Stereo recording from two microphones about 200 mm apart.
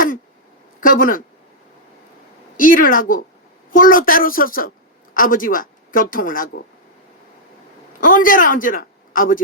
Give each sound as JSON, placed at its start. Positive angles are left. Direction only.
{"t": 0.8, "sound": "speech", "side_deg": 45}
{"t": 2.6, "sound": "a woman's voice", "side_deg": 45}
{"t": 8.0, "sound": "a man's voice", "side_deg": 45}